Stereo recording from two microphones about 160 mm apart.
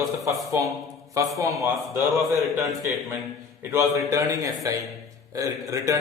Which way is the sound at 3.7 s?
20° right (ahead or behind).